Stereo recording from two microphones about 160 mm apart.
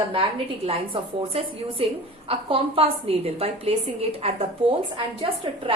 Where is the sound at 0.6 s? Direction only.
40° right (ahead or behind).